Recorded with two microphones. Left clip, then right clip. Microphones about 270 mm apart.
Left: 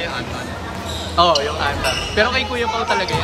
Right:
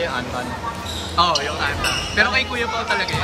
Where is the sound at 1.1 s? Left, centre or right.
Centre.